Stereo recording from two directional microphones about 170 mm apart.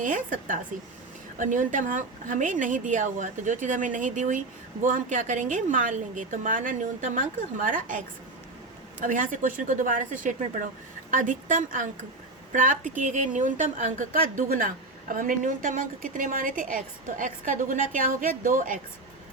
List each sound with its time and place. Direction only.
0.0 s a woman's voice: 50° right (ahead or behind)